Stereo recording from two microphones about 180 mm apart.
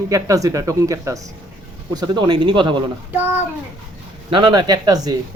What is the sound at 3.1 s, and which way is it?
Speech, 10° right (ahead or behind).